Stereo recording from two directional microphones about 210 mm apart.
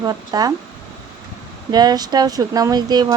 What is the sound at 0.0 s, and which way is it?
Speech, 15° right (ahead or behind).